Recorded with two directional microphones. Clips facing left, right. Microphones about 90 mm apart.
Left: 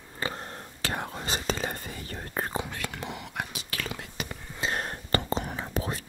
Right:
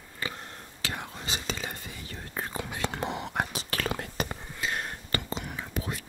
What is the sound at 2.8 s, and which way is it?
Whispering, 30° right (ahead or behind).